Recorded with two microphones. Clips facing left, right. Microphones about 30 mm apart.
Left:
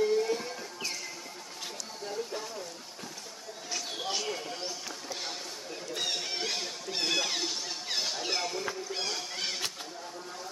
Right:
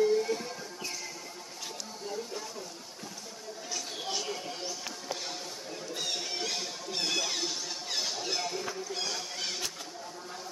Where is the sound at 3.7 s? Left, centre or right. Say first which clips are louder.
Left 2 dB; left.